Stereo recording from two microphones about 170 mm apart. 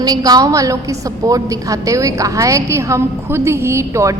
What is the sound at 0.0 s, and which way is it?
A woman's voice, 20° right (ahead or behind).